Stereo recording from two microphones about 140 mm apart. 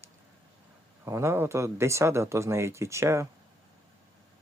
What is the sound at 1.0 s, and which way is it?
Speech, 20° right (ahead or behind).